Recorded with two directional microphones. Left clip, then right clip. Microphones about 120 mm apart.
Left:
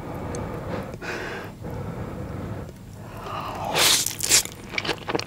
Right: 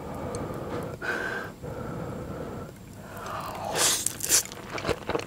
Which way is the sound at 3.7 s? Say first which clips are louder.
Left 7 dB; 15° left (ahead or behind).